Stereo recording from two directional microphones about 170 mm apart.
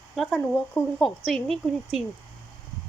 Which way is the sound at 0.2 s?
5° left (ahead or behind).